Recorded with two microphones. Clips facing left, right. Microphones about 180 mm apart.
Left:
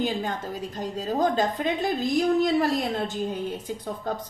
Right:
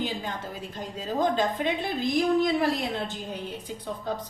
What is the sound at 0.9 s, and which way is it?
A woman's voice, 40° left (ahead or behind).